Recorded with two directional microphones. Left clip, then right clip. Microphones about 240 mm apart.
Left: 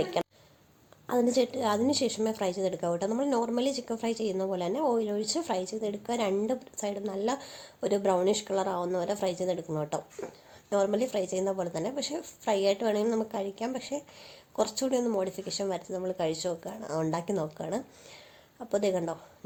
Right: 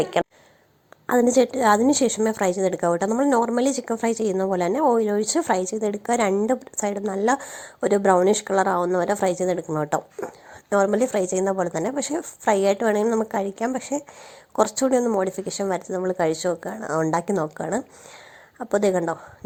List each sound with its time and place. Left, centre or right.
1.0 s a woman's voice: right